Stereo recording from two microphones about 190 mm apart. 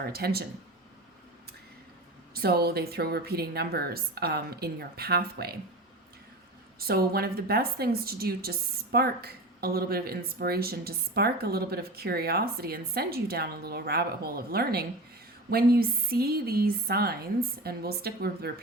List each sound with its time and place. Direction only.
0.0 s a woman's voice: 55° right (ahead or behind)
2.3 s a woman's voice: 55° right (ahead or behind)
6.7 s a woman's voice: 55° right (ahead or behind)